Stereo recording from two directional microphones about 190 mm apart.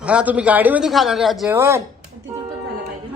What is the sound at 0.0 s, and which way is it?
Speech, 5° right (ahead or behind).